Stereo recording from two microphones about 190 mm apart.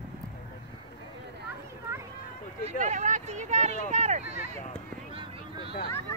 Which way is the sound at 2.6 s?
40° right (ahead or behind).